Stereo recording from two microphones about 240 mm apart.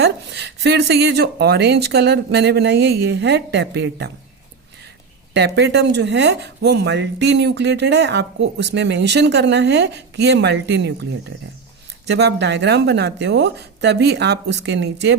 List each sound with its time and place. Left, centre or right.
0.0 s speech: right
5.3 s speech: right
12.0 s speech: right